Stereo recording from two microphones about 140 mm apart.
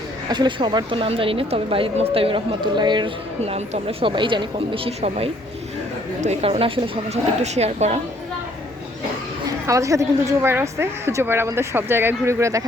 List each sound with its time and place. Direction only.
0.3 s speech: 35° right (ahead or behind)
3.4 s a woman's voice: 45° right (ahead or behind)
9.6 s a woman's voice: 25° right (ahead or behind)